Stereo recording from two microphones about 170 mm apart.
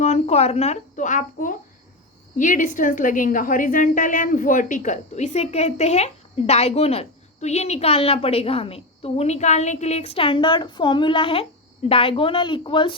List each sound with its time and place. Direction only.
0.0 s a woman's voice: 40° left (ahead or behind)